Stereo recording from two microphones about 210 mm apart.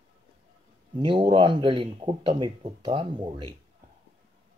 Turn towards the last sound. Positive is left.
turn(degrees=-20)  # may be behind; listen again after turning